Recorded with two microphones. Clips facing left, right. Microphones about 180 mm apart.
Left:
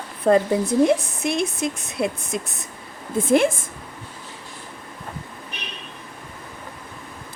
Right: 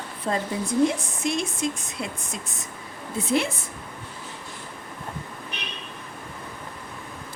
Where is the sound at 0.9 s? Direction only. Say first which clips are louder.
Left 6 dB; 60° left (ahead or behind).